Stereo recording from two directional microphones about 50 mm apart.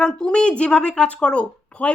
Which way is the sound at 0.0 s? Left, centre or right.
Centre.